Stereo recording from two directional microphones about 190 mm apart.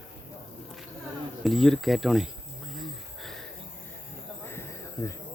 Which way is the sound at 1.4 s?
Centre (ahead or behind).